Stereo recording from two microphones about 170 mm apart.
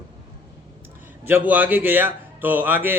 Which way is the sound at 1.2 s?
10° right (ahead or behind).